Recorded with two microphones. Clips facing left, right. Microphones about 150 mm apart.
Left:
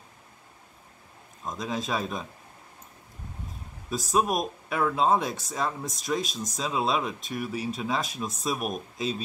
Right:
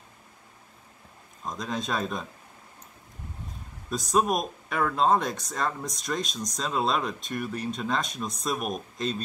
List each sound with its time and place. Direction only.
1.4 s speech: centre (ahead or behind)
3.9 s speech: centre (ahead or behind)